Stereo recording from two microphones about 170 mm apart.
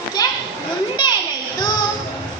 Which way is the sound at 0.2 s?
20° left (ahead or behind).